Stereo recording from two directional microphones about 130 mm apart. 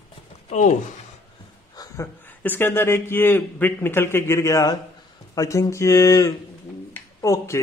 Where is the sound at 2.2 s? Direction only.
15° left (ahead or behind).